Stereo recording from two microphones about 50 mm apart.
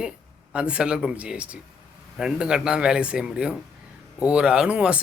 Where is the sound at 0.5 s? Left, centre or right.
Right.